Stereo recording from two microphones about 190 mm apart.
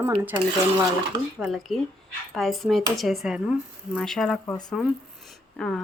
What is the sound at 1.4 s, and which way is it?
Speech, centre (ahead or behind).